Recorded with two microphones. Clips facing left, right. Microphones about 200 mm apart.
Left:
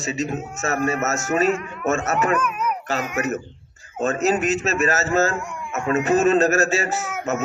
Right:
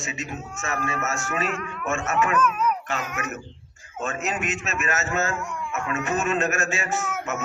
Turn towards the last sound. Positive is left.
turn(degrees=5)  # may be behind; listen again after turning